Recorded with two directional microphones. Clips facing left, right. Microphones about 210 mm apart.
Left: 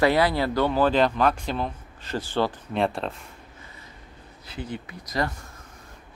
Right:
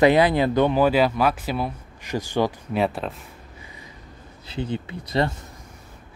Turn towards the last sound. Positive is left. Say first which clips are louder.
# right 5 dB
turn(degrees=-30)  # may be behind; listen again after turning